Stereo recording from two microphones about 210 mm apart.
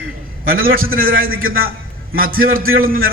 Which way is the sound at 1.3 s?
75° right (ahead or behind).